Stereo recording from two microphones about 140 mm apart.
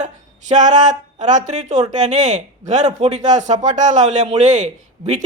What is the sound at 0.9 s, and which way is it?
A man's voice, 60° right (ahead or behind).